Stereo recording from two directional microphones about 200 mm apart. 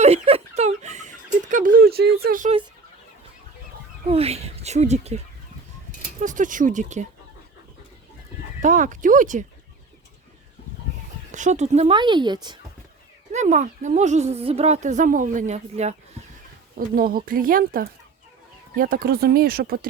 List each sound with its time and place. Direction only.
0.0 s a sound: 30° right (ahead or behind)
4.1 s speech: 30° right (ahead or behind)
8.6 s speech: 40° right (ahead or behind)
11.3 s speech: 35° right (ahead or behind)
11.9 s speech: 20° right (ahead or behind)
13.3 s speech: 35° right (ahead or behind)
16.7 s speech: 45° right (ahead or behind)